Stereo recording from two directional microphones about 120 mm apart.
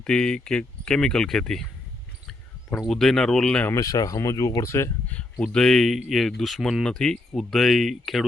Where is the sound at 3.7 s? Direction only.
30° left (ahead or behind).